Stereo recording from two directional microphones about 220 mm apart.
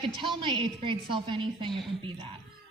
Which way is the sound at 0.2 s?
20° right (ahead or behind).